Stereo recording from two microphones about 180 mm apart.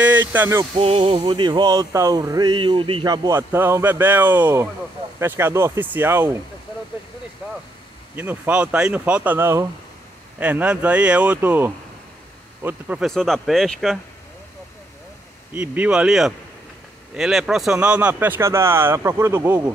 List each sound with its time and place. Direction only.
0.0 s a sound: 10° right (ahead or behind)
0.7 s music: 35° right (ahead or behind); by 4.6 s 10° right (ahead or behind)
5.2 s speech: 15° right (ahead or behind)
8.2 s speech: 10° right (ahead or behind)
15.5 s speech: 10° right (ahead or behind)